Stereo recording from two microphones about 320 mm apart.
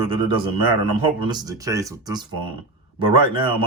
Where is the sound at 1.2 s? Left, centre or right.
Centre.